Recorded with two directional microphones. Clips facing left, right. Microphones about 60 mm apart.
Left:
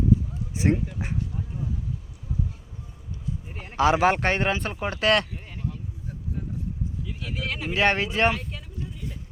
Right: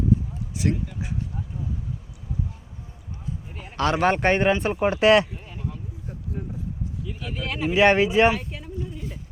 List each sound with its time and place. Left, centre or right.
0.5 s speech: left
3.6 s speech: centre
4.7 s speech: centre
7.0 s speech: centre
8.6 s a sound: centre